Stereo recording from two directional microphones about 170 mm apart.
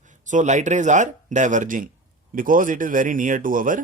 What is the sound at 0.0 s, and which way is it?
Speech, 45° right (ahead or behind).